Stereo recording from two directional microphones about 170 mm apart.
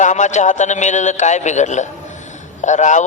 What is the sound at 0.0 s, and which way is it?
A man's voice, 45° left (ahead or behind).